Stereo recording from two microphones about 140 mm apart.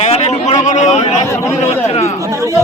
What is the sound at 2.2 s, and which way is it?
Speech, 20° right (ahead or behind).